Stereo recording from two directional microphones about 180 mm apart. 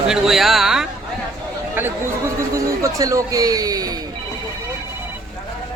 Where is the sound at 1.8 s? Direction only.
15° right (ahead or behind).